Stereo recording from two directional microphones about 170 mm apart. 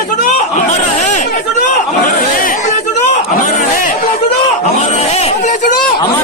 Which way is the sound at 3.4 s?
50° left (ahead or behind).